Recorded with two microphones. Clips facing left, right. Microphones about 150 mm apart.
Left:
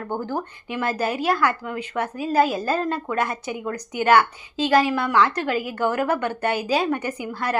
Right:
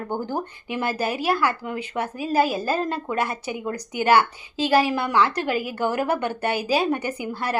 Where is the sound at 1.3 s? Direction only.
30° right (ahead or behind).